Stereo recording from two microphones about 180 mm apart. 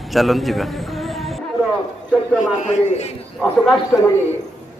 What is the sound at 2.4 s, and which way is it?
Speech, 40° left (ahead or behind).